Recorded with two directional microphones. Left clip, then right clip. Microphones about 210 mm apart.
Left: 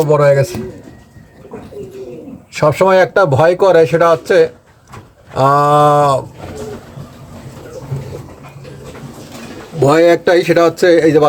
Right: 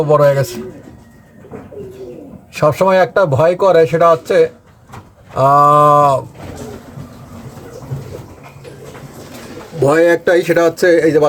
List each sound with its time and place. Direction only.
0.0 s a man's voice: 5° left (ahead or behind)
2.6 s speech: 5° left (ahead or behind)
9.8 s speech: 10° left (ahead or behind)